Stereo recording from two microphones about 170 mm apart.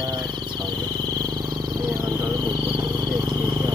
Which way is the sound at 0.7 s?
25° right (ahead or behind).